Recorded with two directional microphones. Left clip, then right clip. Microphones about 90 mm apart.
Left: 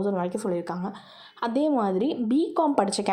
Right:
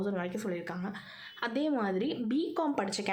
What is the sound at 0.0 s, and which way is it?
Speech, 40° left (ahead or behind).